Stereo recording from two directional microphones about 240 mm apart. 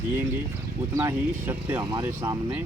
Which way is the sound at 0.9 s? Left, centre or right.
Centre.